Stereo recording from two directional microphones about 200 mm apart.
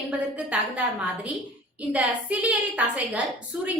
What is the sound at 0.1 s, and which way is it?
Speech, 5° right (ahead or behind).